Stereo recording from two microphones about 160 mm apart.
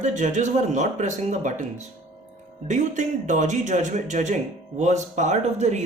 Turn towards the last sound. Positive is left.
turn(degrees=-45)  # may be behind; listen again after turning